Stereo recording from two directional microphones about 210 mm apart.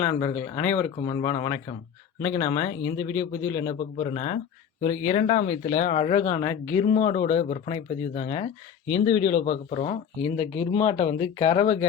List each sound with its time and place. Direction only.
0.0 s a man's voice: 20° left (ahead or behind)
6.2 s speech: 15° left (ahead or behind)
6.8 s speech: 30° left (ahead or behind)